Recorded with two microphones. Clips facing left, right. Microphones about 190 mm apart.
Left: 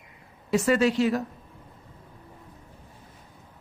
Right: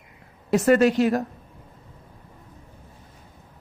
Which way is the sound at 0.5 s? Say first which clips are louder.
Right 4 dB; 55° right (ahead or behind).